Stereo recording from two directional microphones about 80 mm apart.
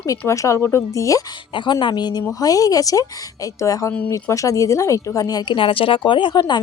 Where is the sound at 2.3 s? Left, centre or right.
Left.